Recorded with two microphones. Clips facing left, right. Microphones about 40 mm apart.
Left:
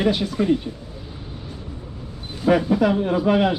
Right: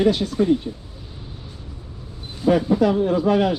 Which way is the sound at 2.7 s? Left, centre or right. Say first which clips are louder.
Right 1 dB; left.